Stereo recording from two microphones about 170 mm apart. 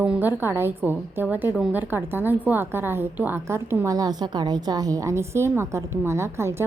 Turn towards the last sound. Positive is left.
turn(degrees=-15)  # may be behind; listen again after turning